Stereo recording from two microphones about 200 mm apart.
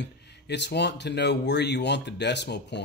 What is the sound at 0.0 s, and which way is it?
A man's voice, 60° left (ahead or behind).